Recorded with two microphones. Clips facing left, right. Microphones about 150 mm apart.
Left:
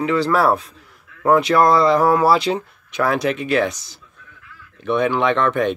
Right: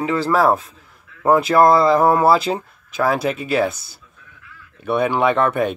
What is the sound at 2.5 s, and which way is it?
Speech, 10° right (ahead or behind).